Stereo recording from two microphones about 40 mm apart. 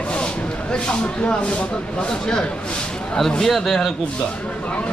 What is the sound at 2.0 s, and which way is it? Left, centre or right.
Speech, centre.